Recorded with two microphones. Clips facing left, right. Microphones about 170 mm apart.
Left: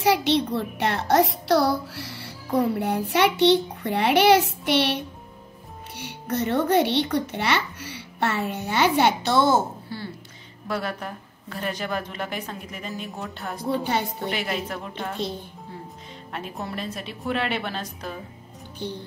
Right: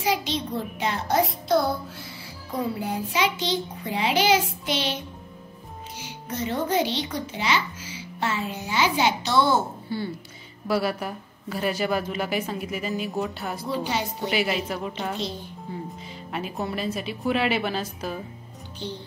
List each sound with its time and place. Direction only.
0.0 s a child's voice: 65° left (ahead or behind); by 9.6 s 50° left (ahead or behind)
9.9 s a woman's voice: centre (ahead or behind)
13.7 s a woman's voice: 55° left (ahead or behind)
14.3 s a woman's voice: 5° right (ahead or behind)
16.3 s a woman's voice: 5° right (ahead or behind)
18.8 s a woman's voice: 55° left (ahead or behind)